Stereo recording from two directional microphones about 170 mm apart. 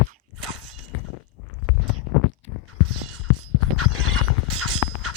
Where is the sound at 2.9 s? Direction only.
Centre (ahead or behind).